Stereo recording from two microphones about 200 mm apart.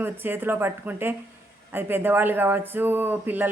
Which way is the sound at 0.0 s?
10° right (ahead or behind).